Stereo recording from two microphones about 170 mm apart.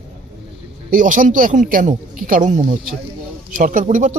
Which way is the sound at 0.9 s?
50° right (ahead or behind).